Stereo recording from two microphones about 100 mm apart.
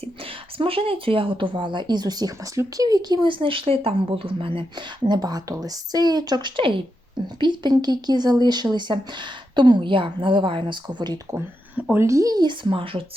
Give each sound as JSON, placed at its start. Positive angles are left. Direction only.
{"t": 0.6, "sound": "speech", "side_deg": -70}
{"t": 5.0, "sound": "speech", "side_deg": -45}
{"t": 11.3, "sound": "speech", "side_deg": -20}